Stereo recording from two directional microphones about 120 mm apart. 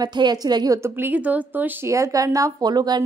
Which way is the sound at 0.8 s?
15° right (ahead or behind).